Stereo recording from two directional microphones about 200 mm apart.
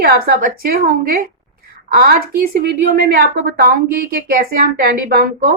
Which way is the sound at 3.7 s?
50° right (ahead or behind).